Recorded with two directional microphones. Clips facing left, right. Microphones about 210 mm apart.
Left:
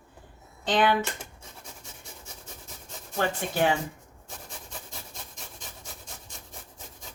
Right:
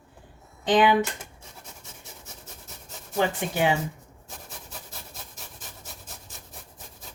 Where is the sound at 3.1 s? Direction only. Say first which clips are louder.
Right 2 dB; 15° right (ahead or behind).